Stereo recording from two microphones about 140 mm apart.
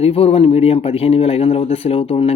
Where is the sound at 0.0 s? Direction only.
45° left (ahead or behind).